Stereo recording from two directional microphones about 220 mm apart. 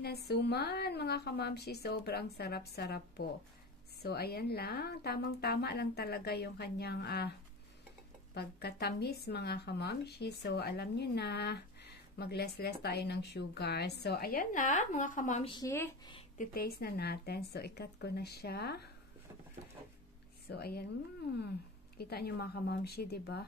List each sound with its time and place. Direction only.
0.0 s speech: 45° left (ahead or behind)
8.4 s speech: 45° left (ahead or behind)
15.5 s speech: 15° left (ahead or behind)
16.3 s speech: 45° left (ahead or behind)
20.4 s speech: 45° left (ahead or behind)
21.9 s speech: 45° left (ahead or behind)